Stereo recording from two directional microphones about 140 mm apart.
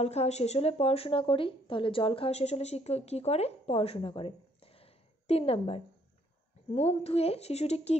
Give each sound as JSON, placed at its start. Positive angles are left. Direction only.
{"t": 0.0, "sound": "speech", "side_deg": 50}